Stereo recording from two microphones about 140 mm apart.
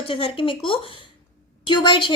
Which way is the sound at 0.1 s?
40° left (ahead or behind).